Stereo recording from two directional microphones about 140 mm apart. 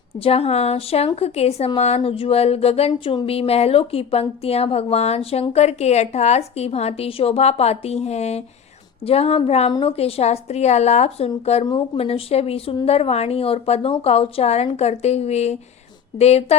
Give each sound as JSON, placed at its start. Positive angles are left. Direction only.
{"t": 0.2, "sound": "speech", "side_deg": 45}